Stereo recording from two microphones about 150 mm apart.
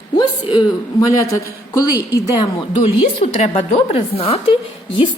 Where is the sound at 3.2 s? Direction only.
40° left (ahead or behind).